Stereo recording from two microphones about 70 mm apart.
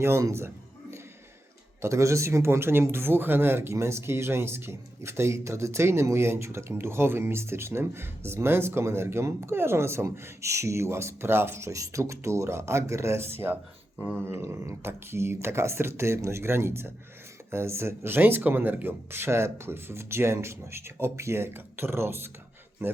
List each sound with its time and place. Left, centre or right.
0.0 s a man's voice: right